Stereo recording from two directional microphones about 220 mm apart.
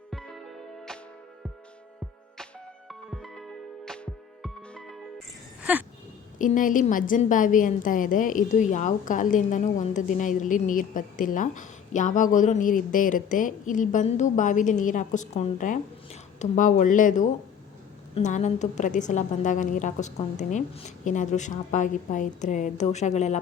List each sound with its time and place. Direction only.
0.1 s music: centre (ahead or behind)
3.1 s music: centre (ahead or behind)
5.7 s a sound: 5° right (ahead or behind)
6.4 s a woman's voice: 35° left (ahead or behind)